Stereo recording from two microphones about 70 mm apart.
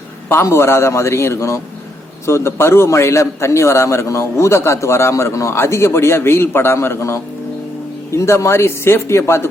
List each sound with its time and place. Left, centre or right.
0.4 s a man's voice: left